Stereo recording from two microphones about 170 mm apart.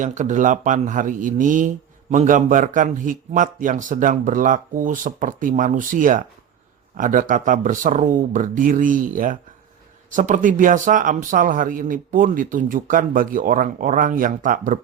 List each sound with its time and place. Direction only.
0.0 s speech: 45° right (ahead or behind)